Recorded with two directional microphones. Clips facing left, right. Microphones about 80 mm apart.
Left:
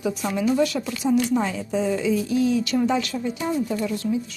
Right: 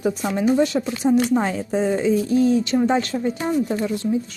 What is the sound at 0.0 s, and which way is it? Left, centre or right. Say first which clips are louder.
Speech: right 3 dB; right.